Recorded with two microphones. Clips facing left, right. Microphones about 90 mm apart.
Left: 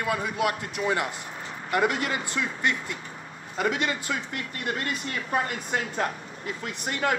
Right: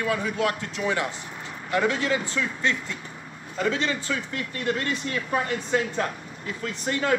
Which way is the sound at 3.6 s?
15° left (ahead or behind).